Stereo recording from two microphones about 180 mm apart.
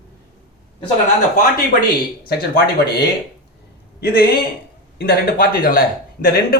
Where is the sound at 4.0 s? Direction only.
55° left (ahead or behind).